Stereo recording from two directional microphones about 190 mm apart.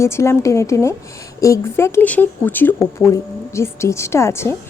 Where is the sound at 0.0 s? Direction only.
15° left (ahead or behind).